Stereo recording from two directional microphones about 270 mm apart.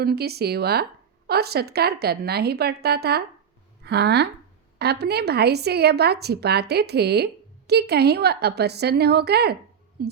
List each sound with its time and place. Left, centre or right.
0.0 s a woman's voice: right